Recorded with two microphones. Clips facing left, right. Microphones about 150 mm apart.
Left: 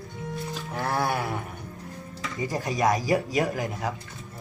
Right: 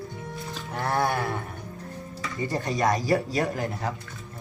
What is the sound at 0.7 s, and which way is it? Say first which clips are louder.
Speech: right 1 dB; centre (ahead or behind).